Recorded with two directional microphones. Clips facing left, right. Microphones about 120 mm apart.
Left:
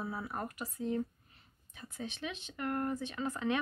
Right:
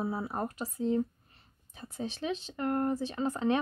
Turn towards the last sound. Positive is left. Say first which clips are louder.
# right 5 dB
turn(degrees=-35)  # may be behind; listen again after turning